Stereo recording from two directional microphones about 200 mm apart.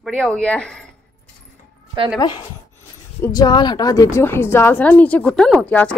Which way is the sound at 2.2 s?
25° left (ahead or behind).